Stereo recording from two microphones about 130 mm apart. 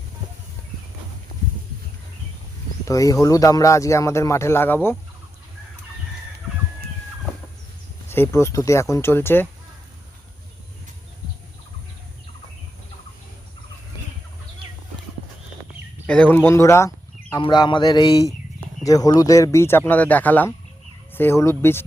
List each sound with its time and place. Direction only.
2.8 s speech: 25° left (ahead or behind)
8.1 s speech: 20° left (ahead or behind)
16.0 s speech: 10° left (ahead or behind)
17.4 s a sound: 35° left (ahead or behind)
18.9 s speech: 30° left (ahead or behind)